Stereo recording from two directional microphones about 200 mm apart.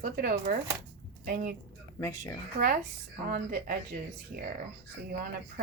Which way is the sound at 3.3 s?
45° right (ahead or behind).